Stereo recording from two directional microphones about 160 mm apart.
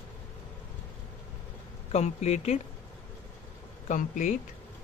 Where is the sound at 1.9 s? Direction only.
40° left (ahead or behind).